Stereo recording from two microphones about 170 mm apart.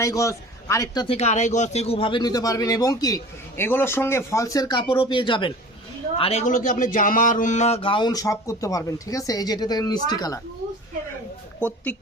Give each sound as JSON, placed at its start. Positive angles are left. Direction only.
{"t": 0.0, "sound": "a man's voice", "side_deg": 20}
{"t": 1.0, "sound": "speech", "side_deg": 40}
{"t": 11.9, "sound": "speech", "side_deg": 10}